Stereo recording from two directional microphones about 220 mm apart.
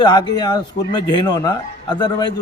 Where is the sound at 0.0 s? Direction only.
20° left (ahead or behind).